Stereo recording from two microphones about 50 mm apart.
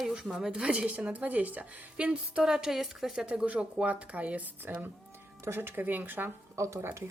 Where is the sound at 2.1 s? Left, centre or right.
Centre.